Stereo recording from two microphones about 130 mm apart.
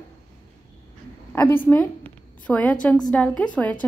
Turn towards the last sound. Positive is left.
turn(degrees=10)  # may be behind; listen again after turning